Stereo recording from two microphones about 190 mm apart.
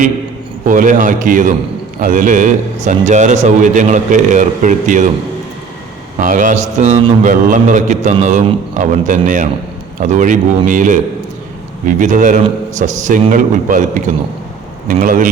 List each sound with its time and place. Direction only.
0.6 s a man's voice: 45° right (ahead or behind)
6.1 s a man's voice: 45° right (ahead or behind)
14.8 s a man's voice: 45° right (ahead or behind)